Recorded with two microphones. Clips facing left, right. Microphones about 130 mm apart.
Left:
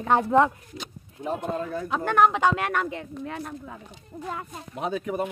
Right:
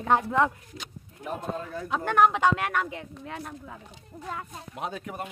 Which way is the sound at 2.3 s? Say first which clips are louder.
Left 1 dB; centre (ahead or behind).